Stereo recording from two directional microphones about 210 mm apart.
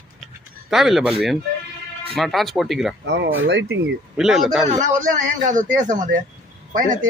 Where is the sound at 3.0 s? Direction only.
55° right (ahead or behind).